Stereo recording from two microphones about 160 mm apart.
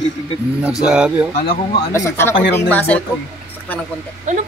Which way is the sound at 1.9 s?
15° left (ahead or behind).